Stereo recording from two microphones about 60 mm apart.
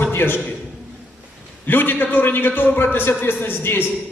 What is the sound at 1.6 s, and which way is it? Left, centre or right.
A man's voice, left.